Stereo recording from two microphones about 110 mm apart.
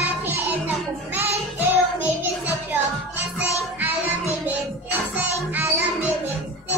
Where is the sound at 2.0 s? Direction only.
15° right (ahead or behind).